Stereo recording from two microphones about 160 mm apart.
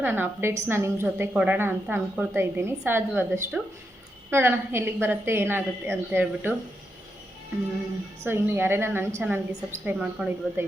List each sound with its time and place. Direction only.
0.0 s a woman's voice: 15° right (ahead or behind)
8.2 s a woman's voice: 15° right (ahead or behind)